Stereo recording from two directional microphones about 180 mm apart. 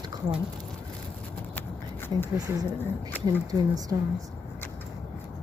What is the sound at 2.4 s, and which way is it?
Speech, 20° right (ahead or behind).